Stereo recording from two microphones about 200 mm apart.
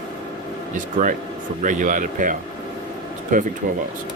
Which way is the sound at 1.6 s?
40° right (ahead or behind).